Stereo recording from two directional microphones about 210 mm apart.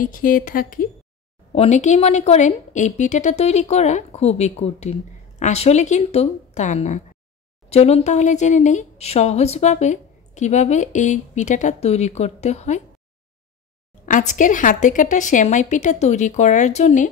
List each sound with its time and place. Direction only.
0.0 s speech: 40° left (ahead or behind)
1.5 s speech: 30° left (ahead or behind)
14.0 s speech: 40° left (ahead or behind)